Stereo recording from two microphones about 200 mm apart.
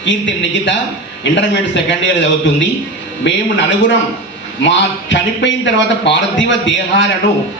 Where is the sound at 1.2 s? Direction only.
65° left (ahead or behind).